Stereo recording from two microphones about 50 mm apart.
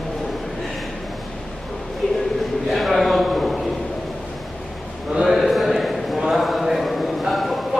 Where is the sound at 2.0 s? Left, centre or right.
Left.